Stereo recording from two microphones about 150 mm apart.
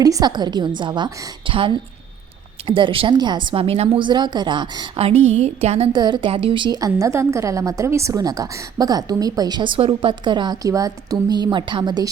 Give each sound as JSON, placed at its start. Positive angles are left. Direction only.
{"t": 0.0, "sound": "a woman's voice", "side_deg": -25}
{"t": 5.9, "sound": "a woman's voice", "side_deg": -30}